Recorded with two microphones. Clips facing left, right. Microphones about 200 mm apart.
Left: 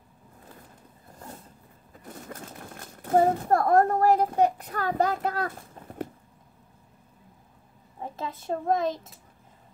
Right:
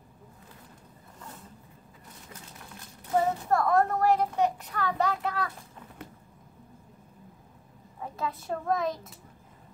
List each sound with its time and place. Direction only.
2.0 s a sound: 55° left (ahead or behind)
3.9 s a child's voice: 35° left (ahead or behind)
8.0 s a child's voice: 25° left (ahead or behind)